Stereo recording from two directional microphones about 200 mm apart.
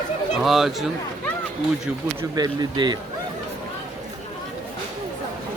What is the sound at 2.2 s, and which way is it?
Speech, 20° right (ahead or behind).